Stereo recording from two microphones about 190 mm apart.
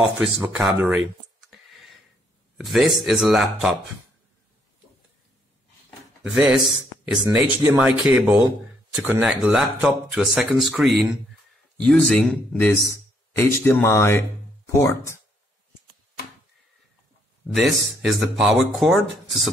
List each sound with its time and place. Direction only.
0.2 s speech: 5° right (ahead or behind)
1.5 s a sound: centre (ahead or behind)
2.5 s speech: centre (ahead or behind)
6.3 s speech: 5° right (ahead or behind); by 15.1 s 15° left (ahead or behind)
17.6 s speech: centre (ahead or behind)